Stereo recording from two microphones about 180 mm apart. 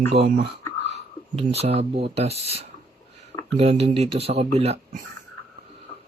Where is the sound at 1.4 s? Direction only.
35° right (ahead or behind).